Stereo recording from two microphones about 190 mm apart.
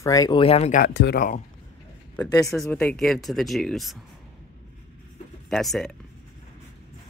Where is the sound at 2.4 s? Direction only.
Centre (ahead or behind).